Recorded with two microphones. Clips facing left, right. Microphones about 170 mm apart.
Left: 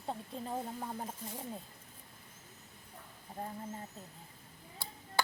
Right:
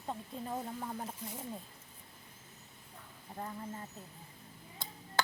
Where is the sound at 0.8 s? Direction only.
30° left (ahead or behind).